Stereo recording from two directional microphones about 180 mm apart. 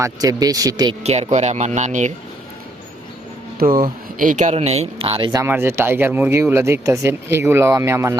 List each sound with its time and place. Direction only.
0.0 s speech: 20° right (ahead or behind)
1.0 s speech: 35° right (ahead or behind)
3.6 s speech: 55° right (ahead or behind); by 5.5 s 25° right (ahead or behind)
5.5 s speech: 10° right (ahead or behind)